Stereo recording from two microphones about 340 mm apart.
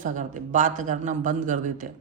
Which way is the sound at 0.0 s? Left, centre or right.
Right.